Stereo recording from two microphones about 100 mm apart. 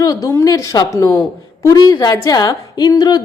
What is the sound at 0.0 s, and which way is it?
A woman's voice, 35° left (ahead or behind).